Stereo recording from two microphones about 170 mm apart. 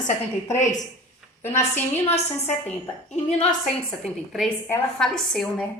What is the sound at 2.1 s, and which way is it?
Speech, 40° left (ahead or behind).